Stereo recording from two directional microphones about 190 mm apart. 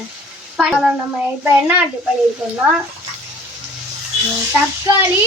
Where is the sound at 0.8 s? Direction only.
10° right (ahead or behind).